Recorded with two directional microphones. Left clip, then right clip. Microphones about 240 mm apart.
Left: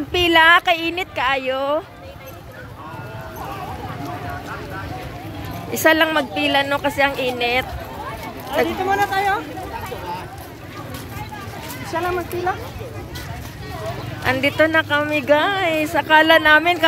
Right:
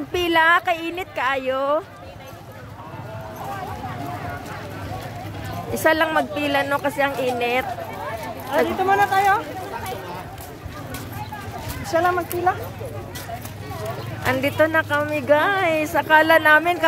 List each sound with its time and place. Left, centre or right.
0.1 s speech: centre
5.7 s speech: centre
8.8 s speech: right
11.9 s speech: right
14.2 s speech: centre